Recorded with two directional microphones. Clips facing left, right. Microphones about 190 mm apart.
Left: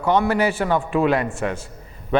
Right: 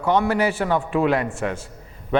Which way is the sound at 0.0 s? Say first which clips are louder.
Left 1 dB; 15° left (ahead or behind).